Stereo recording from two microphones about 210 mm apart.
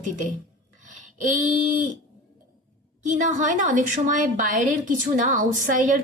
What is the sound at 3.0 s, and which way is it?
A woman's voice, 35° right (ahead or behind).